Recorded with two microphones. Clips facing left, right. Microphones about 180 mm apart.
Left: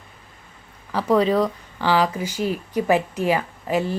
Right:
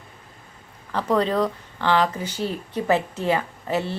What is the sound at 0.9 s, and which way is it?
Speech, 10° left (ahead or behind).